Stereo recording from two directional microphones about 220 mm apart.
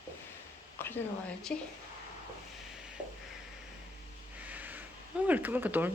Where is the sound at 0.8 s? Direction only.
10° left (ahead or behind).